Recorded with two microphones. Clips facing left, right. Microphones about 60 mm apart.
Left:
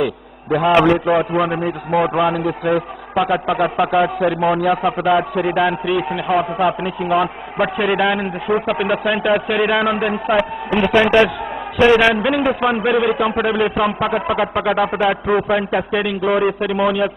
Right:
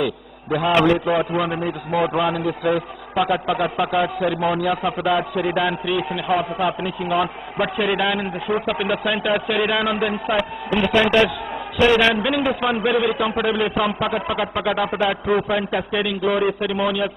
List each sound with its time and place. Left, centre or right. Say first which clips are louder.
0.0 s a man's voice: left 3 dB; centre
0.7 s a man's voice: left 2 dB; centre
1.1 s a man's voice: left 4 dB; centre
10.3 s a man's voice: left 4 dB; centre
12.1 s a man's voice: left 3 dB; centre